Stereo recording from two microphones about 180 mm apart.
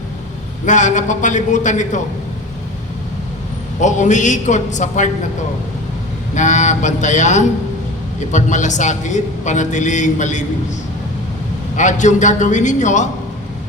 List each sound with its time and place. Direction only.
0.6 s a man's voice: 45° left (ahead or behind)
3.8 s a man's voice: 45° left (ahead or behind)
6.3 s a man's voice: 40° left (ahead or behind)
11.8 s a man's voice: 40° left (ahead or behind)